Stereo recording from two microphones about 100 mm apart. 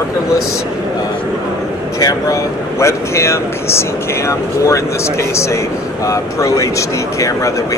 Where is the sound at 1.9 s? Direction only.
30° left (ahead or behind).